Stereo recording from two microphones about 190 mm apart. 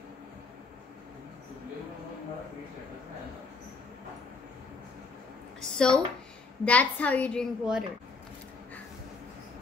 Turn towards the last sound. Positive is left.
turn(degrees=0)  # may be behind; listen again after turning